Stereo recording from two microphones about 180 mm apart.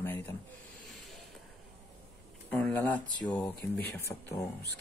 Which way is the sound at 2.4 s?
10° left (ahead or behind).